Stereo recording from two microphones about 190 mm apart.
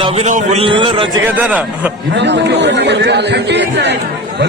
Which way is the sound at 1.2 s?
10° right (ahead or behind).